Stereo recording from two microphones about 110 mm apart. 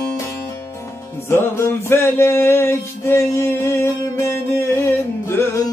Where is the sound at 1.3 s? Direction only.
20° left (ahead or behind).